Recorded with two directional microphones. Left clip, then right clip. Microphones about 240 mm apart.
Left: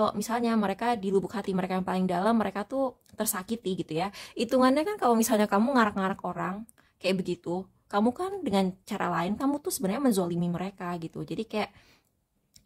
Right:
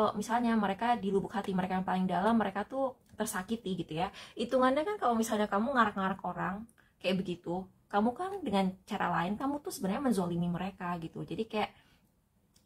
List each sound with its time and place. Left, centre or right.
0.2 s speech: left